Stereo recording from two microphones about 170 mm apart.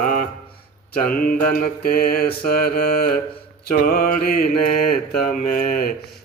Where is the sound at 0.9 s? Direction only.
55° left (ahead or behind).